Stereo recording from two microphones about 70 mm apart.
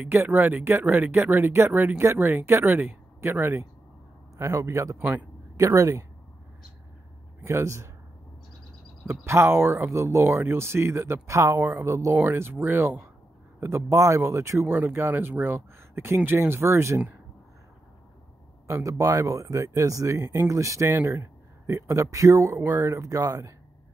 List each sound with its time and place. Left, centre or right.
0.0 s speech: right
1.7 s speech: right
4.4 s speech: right
7.4 s speech: right
9.2 s speech: right
18.7 s speech: right